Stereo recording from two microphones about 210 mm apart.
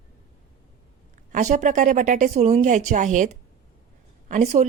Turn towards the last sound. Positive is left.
turn(degrees=-35)  # may be behind; listen again after turning